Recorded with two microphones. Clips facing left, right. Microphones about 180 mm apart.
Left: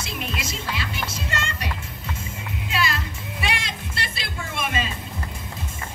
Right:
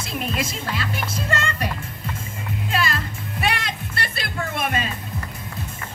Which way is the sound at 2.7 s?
50° right (ahead or behind).